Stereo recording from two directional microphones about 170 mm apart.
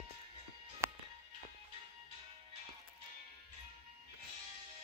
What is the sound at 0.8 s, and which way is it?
Music, 15° right (ahead or behind).